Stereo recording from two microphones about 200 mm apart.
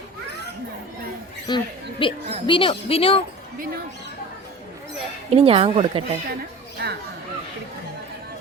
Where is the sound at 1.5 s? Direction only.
25° left (ahead or behind).